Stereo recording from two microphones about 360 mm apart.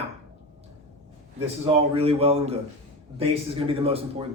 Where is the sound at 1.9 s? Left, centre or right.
Centre.